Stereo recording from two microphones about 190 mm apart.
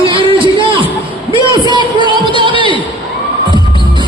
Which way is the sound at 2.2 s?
25° right (ahead or behind).